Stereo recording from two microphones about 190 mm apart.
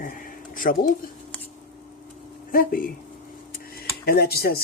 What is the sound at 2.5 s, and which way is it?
Speech, 50° left (ahead or behind).